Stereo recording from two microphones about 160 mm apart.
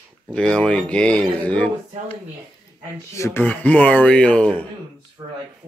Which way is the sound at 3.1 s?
15° left (ahead or behind).